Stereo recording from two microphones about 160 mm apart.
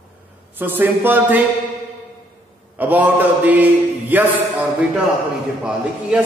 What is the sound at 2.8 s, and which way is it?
A man's voice, 10° right (ahead or behind).